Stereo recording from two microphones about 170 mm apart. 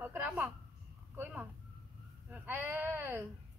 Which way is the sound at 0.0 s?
10° right (ahead or behind).